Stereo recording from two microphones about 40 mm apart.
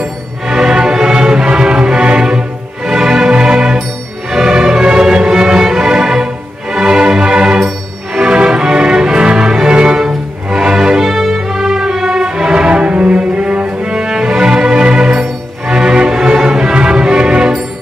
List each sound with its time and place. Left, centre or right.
0.5 s music: centre
7.6 s music: centre
13.7 s cello: centre